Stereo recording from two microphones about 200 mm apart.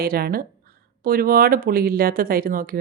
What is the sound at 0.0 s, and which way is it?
Speech, 50° right (ahead or behind).